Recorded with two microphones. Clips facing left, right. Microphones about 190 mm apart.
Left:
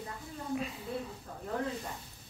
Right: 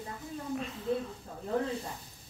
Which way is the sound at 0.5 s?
5° left (ahead or behind).